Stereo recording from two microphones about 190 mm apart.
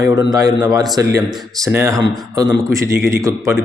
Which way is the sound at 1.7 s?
15° right (ahead or behind).